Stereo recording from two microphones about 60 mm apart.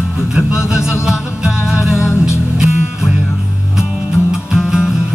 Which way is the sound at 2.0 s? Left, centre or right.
Left.